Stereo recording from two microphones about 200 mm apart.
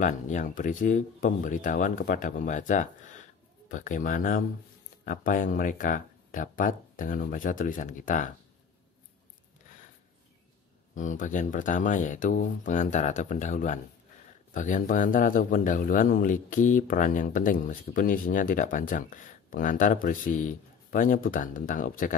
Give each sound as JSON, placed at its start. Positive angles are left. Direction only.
{"t": 0.0, "sound": "speech", "side_deg": 40}
{"t": 11.0, "sound": "a man's voice", "side_deg": 40}